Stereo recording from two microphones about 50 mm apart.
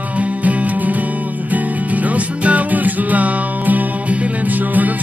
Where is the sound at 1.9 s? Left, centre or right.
Right.